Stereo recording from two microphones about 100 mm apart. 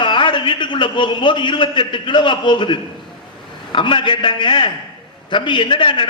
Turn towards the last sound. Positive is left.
turn(degrees=55)  # may be behind; listen again after turning